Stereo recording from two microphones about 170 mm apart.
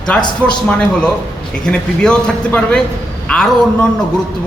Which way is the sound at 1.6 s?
5° left (ahead or behind).